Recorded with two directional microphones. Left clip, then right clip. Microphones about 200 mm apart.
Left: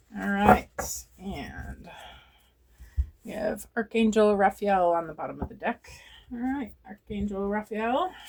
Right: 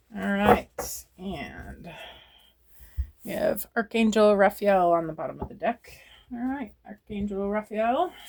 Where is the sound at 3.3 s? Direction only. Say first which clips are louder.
Right 4 dB; 40° right (ahead or behind).